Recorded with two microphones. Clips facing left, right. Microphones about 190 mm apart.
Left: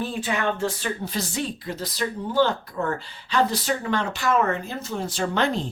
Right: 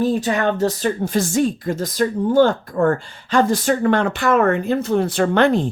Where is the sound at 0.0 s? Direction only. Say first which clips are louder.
Right 8 dB; 40° right (ahead or behind).